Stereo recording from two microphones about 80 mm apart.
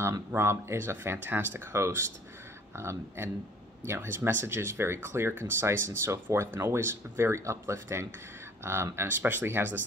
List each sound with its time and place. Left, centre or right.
0.3 s speech: right